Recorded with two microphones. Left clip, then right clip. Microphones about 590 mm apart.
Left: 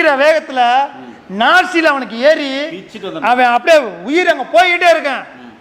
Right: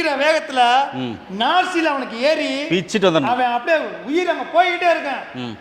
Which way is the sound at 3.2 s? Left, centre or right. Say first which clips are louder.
Left 8 dB; left.